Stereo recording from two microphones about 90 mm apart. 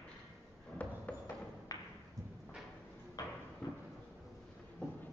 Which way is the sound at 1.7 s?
45° left (ahead or behind).